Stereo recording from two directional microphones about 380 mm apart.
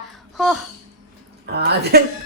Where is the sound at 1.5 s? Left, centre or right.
Right.